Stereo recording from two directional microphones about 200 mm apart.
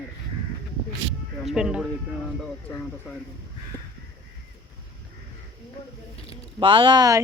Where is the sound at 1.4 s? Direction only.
5° right (ahead or behind).